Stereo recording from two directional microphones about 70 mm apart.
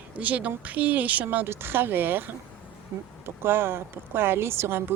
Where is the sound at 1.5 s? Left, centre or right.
Right.